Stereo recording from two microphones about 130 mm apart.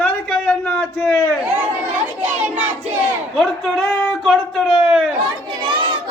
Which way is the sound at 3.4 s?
Centre (ahead or behind).